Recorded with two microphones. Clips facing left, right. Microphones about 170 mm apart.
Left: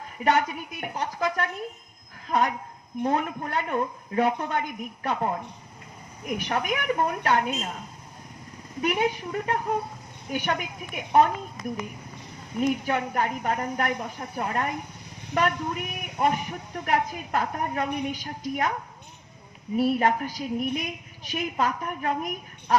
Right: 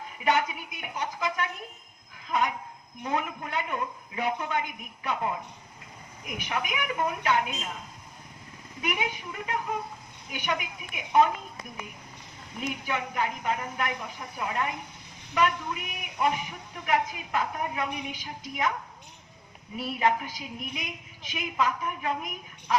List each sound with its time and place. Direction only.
0.3 s a woman's voice: 45° left (ahead or behind)
8.8 s a woman's voice: 40° left (ahead or behind)
19.7 s a woman's voice: 45° left (ahead or behind)